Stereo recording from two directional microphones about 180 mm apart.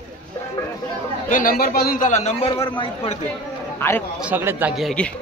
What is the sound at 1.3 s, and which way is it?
A man's voice, 50° left (ahead or behind).